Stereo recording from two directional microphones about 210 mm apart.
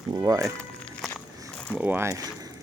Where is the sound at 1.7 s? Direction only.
10° right (ahead or behind).